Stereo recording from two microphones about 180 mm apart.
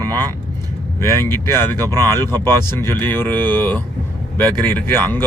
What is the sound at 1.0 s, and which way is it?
Speech, 15° left (ahead or behind).